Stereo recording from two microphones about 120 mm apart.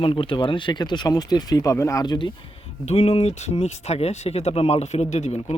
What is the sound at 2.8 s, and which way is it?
Speech, 60° left (ahead or behind).